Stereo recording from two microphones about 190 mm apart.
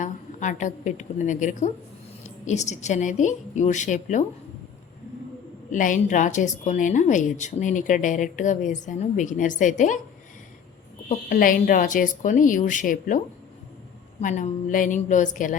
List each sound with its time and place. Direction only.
0.0 s a woman's voice: 40° left (ahead or behind)
5.7 s a woman's voice: 45° left (ahead or behind)
11.1 s a woman's voice: 40° left (ahead or behind)